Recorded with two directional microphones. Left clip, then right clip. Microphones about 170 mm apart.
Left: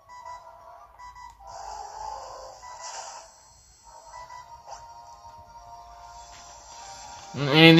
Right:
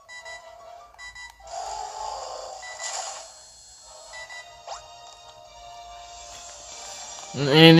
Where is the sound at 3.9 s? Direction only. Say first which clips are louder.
Right 2 dB; 50° right (ahead or behind).